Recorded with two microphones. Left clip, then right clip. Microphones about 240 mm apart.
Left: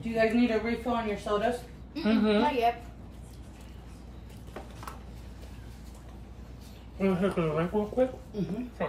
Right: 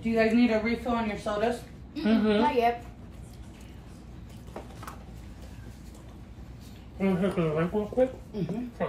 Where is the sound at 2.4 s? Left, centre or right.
Centre.